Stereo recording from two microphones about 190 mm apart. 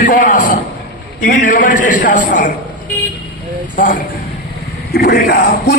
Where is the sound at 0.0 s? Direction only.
40° left (ahead or behind).